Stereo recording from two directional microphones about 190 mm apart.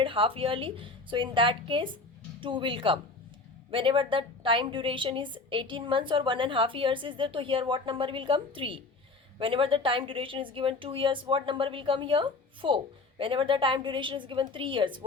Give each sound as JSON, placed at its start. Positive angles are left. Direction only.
{"t": 0.0, "sound": "a woman's voice", "side_deg": -25}